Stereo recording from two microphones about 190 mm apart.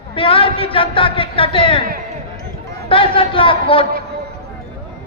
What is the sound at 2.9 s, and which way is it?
Speech, 30° left (ahead or behind).